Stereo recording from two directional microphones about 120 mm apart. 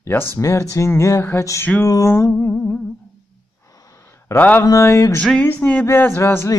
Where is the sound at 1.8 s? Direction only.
20° left (ahead or behind).